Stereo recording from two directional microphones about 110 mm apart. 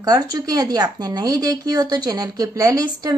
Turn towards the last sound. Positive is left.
turn(degrees=-35)  # may be behind; listen again after turning